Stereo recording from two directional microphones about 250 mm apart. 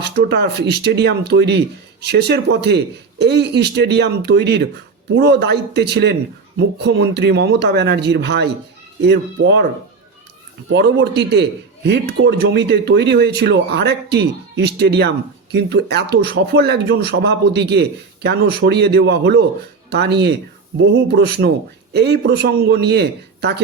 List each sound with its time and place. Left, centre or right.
0.0 s a man's voice: right
10.7 s a man's voice: right